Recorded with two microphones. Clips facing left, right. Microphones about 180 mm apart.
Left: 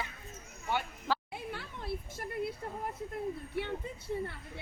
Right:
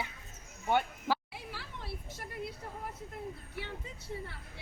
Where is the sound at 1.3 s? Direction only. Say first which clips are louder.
Left 4 dB; 55° left (ahead or behind).